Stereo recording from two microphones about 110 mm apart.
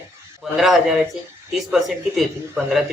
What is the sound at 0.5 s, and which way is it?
Speech, centre (ahead or behind).